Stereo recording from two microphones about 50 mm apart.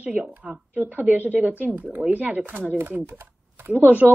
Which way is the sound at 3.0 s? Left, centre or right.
Right.